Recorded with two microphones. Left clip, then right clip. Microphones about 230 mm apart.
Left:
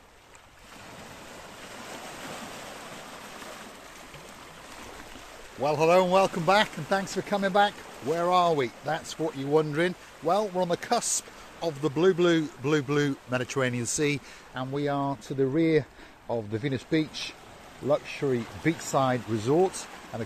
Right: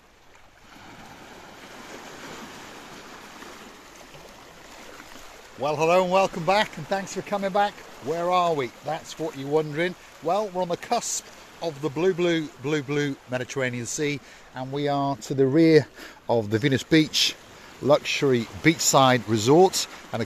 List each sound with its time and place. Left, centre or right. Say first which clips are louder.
5.6 s speech: right 1 dB; centre
14.7 s speech: right 4 dB; right